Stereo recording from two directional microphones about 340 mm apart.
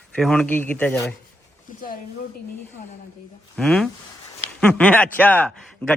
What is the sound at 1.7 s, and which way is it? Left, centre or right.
Speech, left.